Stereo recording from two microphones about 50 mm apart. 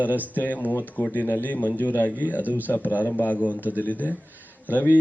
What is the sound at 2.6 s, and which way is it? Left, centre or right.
Speech, left.